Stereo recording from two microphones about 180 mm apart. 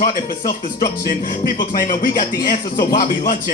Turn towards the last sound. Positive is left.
turn(degrees=50)  # may be behind; listen again after turning